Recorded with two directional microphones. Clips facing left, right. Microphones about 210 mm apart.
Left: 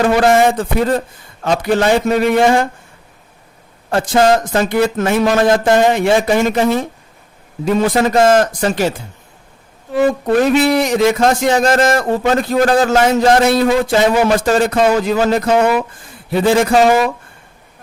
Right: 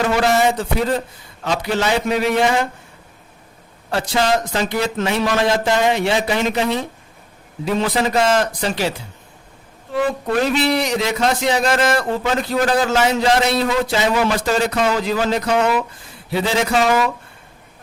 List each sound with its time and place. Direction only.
0.0 s a man's voice: 50° left (ahead or behind)
3.9 s a man's voice: 50° left (ahead or behind)